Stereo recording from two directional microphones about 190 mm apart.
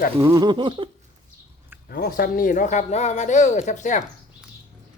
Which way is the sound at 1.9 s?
50° left (ahead or behind).